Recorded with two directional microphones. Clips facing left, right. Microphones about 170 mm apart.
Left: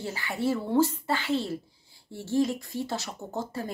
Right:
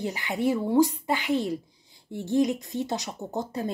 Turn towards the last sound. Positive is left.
turn(degrees=-20)  # may be behind; listen again after turning